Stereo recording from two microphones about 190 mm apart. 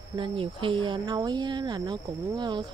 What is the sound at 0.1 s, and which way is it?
Speech, 25° right (ahead or behind).